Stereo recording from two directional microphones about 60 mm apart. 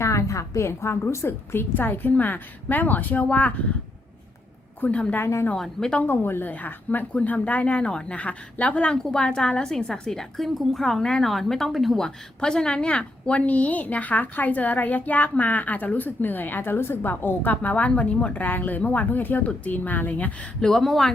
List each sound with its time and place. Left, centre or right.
0.0 s a woman's voice: left
1.3 s a woman's voice: left
4.8 s a woman's voice: left
5.2 s speech: left
5.5 s a woman's voice: centre
6.0 s a woman's voice: left
9.0 s a woman's voice: centre; by 20.3 s left
20.6 s speech: centre